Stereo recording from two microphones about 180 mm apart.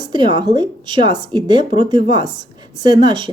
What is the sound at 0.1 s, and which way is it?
A woman's voice, 25° right (ahead or behind).